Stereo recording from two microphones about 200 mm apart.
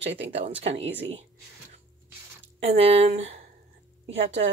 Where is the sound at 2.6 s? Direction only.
30° right (ahead or behind).